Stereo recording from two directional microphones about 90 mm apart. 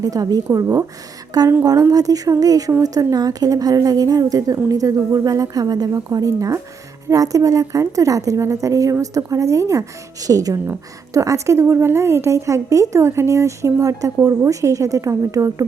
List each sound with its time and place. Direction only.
0.0 s a woman's voice: 45° right (ahead or behind)